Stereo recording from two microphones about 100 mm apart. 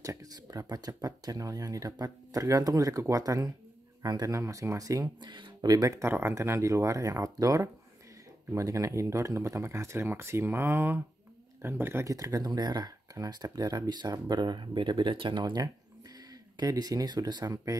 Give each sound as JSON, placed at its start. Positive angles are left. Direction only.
{"t": 0.0, "sound": "speech", "side_deg": -35}